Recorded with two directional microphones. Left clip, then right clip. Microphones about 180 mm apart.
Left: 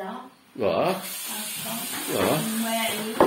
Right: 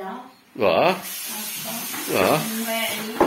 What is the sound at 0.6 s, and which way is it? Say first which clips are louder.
Speech: right 5 dB; 10° right (ahead or behind).